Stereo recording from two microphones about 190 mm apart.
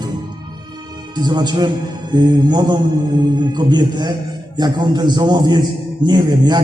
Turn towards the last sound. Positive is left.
turn(degrees=-20)  # may be behind; listen again after turning